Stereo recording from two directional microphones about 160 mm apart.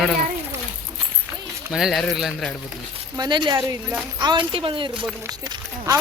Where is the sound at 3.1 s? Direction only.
25° right (ahead or behind).